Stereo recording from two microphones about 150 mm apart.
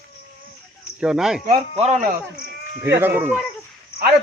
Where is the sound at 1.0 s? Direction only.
5° right (ahead or behind).